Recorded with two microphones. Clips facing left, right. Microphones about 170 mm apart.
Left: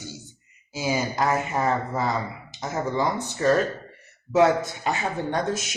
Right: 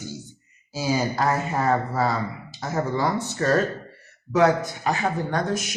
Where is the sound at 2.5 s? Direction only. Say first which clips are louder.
Right 1 dB; 20° left (ahead or behind).